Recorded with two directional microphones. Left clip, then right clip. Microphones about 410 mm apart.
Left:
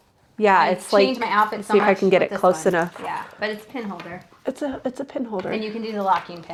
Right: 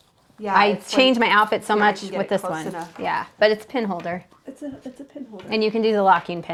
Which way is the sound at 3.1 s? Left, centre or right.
Right.